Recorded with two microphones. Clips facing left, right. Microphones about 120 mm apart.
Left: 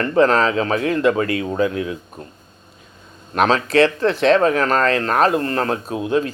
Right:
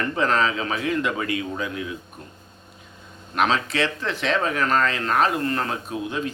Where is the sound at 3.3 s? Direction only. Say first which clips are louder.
Left 7 dB; 40° left (ahead or behind).